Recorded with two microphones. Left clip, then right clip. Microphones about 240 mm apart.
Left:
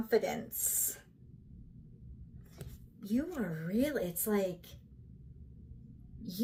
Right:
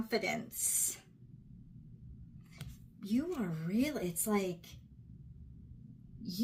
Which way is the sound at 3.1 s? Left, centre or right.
Centre.